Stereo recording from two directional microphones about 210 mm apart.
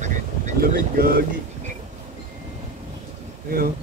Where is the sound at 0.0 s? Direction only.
40° right (ahead or behind).